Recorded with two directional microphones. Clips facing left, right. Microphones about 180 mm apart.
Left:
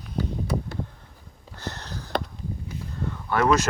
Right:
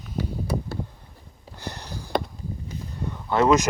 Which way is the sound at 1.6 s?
15° right (ahead or behind).